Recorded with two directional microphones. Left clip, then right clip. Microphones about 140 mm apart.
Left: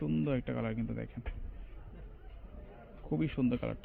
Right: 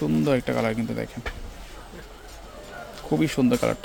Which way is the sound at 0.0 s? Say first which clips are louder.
Right 12 dB; 45° right (ahead or behind).